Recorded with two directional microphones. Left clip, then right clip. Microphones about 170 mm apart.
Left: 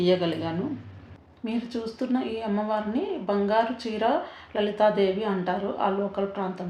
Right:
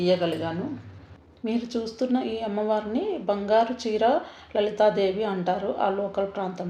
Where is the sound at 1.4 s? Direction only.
30° right (ahead or behind).